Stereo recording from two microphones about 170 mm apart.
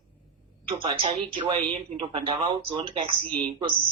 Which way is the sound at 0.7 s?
30° right (ahead or behind).